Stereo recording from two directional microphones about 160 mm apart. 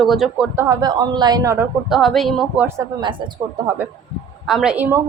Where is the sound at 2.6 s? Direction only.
15° right (ahead or behind).